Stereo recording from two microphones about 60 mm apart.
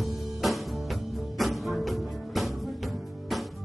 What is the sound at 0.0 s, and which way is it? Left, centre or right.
Music, centre.